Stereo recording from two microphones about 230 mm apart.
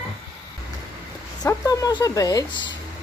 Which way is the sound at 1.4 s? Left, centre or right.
Centre.